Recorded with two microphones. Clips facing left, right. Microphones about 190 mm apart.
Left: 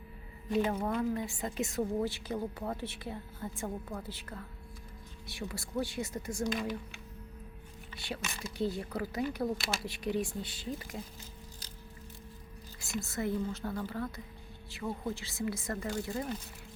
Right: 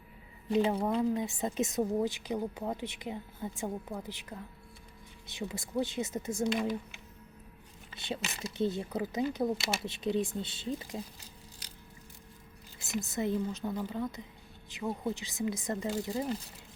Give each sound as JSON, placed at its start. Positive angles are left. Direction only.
{"t": 0.5, "sound": "a woman's voice", "side_deg": -20}
{"t": 7.9, "sound": "a woman's voice", "side_deg": -25}
{"t": 12.8, "sound": "a woman's voice", "side_deg": -20}